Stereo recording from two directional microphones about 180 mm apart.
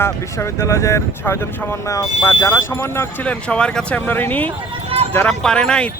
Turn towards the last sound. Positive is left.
turn(degrees=5)  # may be behind; listen again after turning